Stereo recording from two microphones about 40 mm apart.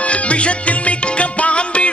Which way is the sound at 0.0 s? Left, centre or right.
Left.